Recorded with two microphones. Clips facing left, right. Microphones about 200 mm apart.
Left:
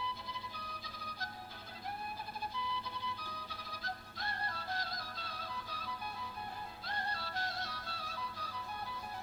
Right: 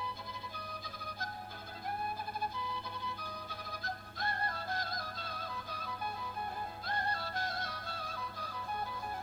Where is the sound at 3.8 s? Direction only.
50° right (ahead or behind).